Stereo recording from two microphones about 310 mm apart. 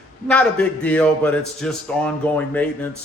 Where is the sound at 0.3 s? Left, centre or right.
Centre.